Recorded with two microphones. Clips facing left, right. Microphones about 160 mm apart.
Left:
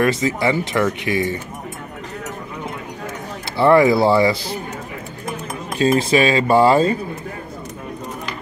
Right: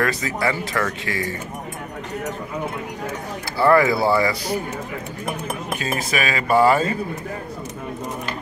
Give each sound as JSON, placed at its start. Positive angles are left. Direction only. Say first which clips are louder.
{"t": 0.0, "sound": "speech", "louder": "left 4 dB", "side_deg": 20}
{"t": 3.5, "sound": "speech", "louder": "left 4 dB", "side_deg": 25}
{"t": 5.8, "sound": "speech", "louder": "left 12 dB", "side_deg": 30}